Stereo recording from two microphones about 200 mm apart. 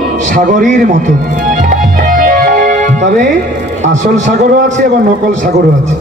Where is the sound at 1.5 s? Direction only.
40° right (ahead or behind).